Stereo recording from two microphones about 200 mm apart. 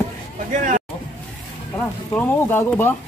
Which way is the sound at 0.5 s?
40° right (ahead or behind).